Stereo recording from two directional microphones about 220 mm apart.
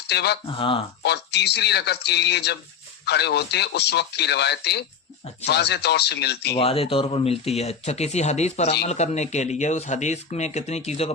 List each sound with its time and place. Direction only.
0.1 s speech: 50° left (ahead or behind)
0.4 s speech: 25° left (ahead or behind)
1.0 s speech: 50° left (ahead or behind)
6.5 s speech: 25° left (ahead or behind)